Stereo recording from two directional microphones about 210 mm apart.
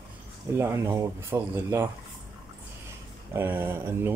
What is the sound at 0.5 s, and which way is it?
Speech, 10° right (ahead or behind).